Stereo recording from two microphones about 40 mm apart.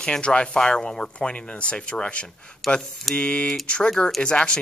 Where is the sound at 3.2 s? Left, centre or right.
Left.